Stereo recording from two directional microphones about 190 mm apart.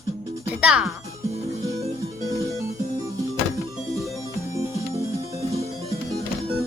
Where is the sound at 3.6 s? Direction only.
Centre (ahead or behind).